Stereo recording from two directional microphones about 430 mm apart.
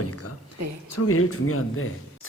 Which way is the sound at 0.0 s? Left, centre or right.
Left.